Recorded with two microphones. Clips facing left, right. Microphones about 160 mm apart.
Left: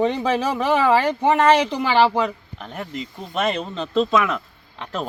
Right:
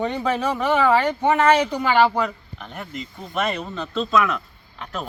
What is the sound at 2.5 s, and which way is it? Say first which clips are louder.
Speech: left 3 dB; 35° left (ahead or behind).